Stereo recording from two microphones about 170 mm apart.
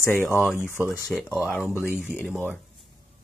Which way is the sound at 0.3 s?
5° right (ahead or behind).